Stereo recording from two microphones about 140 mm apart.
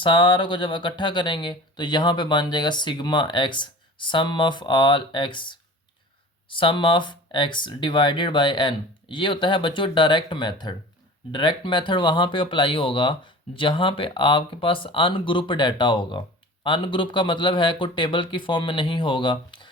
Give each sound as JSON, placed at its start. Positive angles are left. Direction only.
{"t": 0.0, "sound": "speech", "side_deg": 35}
{"t": 6.5, "sound": "speech", "side_deg": 35}